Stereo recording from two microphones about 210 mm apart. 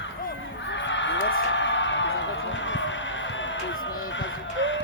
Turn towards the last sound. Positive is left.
turn(degrees=65)  # may be behind; listen again after turning